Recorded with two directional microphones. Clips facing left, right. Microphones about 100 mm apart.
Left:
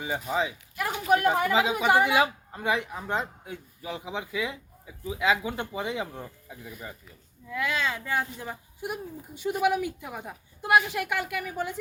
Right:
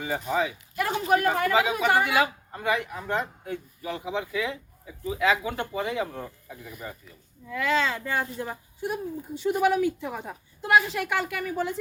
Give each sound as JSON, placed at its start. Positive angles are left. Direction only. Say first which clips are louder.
{"t": 0.0, "sound": "speech", "louder": "right 2 dB", "side_deg": 15}
{"t": 7.5, "sound": "speech", "louder": "right 4 dB", "side_deg": 10}